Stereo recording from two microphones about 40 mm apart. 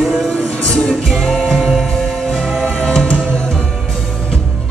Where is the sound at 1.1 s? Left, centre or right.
Centre.